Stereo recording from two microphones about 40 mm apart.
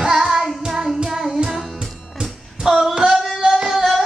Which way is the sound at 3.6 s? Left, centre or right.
Centre.